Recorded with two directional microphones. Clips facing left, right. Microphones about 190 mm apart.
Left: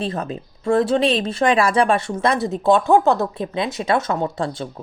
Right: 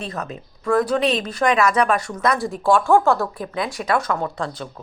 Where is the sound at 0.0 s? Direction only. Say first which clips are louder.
Left 5 dB; 30° left (ahead or behind).